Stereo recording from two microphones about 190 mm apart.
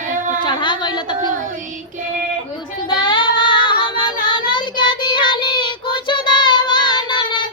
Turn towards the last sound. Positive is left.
turn(degrees=25)  # may be behind; listen again after turning